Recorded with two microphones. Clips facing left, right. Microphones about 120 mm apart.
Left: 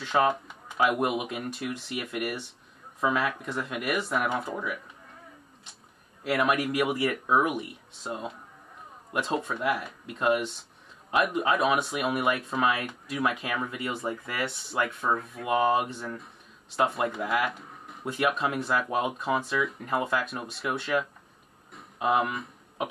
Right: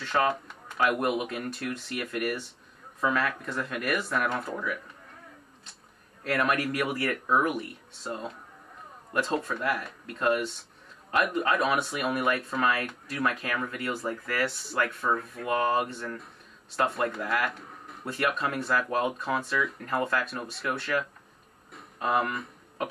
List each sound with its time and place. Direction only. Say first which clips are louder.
0.0 s speech: left 2 dB; 5° left (ahead or behind)
6.2 s speech: left 1 dB; 5° left (ahead or behind)